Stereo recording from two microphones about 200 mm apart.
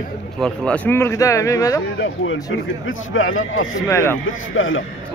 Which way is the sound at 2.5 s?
75° left (ahead or behind).